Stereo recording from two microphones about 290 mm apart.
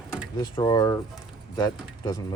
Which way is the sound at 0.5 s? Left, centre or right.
Centre.